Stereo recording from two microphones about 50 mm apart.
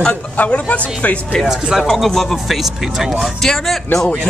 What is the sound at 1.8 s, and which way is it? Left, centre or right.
Speech, centre.